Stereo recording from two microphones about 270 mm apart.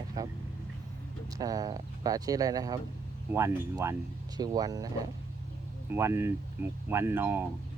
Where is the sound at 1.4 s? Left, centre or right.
Centre.